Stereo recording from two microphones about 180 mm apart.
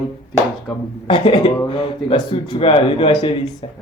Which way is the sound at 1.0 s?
30° left (ahead or behind).